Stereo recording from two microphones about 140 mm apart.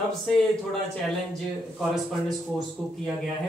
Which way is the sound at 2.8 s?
5° right (ahead or behind).